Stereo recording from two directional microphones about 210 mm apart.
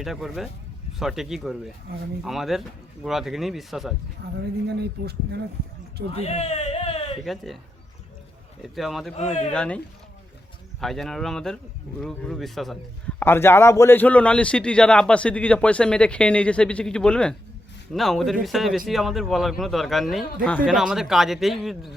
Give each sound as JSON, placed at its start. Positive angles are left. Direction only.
{"t": 0.0, "sound": "a man's voice", "side_deg": 0}
{"t": 4.2, "sound": "speech", "side_deg": -45}
{"t": 6.1, "sound": "a sound", "side_deg": 30}
{"t": 7.3, "sound": "a man's voice", "side_deg": 0}
{"t": 8.6, "sound": "a man's voice", "side_deg": 0}
{"t": 9.1, "sound": "speech", "side_deg": 30}
{"t": 9.5, "sound": "a man's voice", "side_deg": 5}